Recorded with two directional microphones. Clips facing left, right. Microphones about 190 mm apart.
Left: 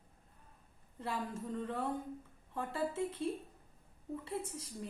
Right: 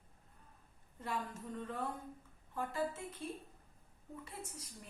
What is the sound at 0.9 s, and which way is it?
Speech, 30° left (ahead or behind).